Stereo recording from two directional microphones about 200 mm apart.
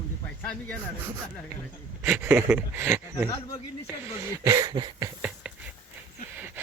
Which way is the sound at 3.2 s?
20° left (ahead or behind).